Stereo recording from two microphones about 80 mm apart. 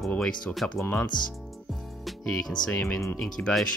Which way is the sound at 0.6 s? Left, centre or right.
Centre.